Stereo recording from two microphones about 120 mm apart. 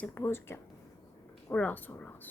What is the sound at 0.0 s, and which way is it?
Speech, 20° left (ahead or behind).